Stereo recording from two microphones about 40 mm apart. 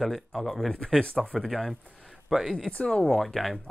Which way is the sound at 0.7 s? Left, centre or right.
Left.